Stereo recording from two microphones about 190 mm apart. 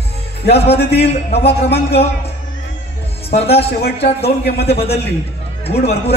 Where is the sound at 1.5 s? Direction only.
60° left (ahead or behind).